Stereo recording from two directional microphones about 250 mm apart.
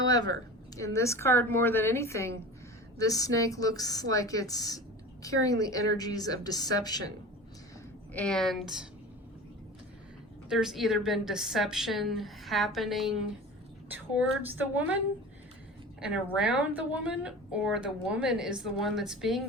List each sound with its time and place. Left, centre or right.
0.0 s a woman's voice: centre
8.1 s a woman's voice: centre
10.5 s a woman's voice: centre
16.0 s a woman's voice: centre